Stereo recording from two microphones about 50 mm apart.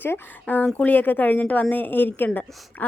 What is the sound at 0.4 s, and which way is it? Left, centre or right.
A woman's voice, left.